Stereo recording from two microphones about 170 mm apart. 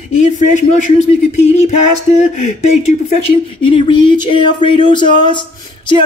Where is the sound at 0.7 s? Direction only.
40° left (ahead or behind).